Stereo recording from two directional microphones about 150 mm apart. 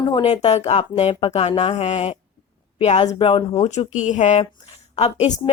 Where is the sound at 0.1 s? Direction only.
40° left (ahead or behind).